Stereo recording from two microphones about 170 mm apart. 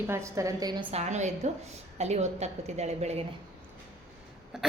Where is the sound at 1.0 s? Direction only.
45° right (ahead or behind).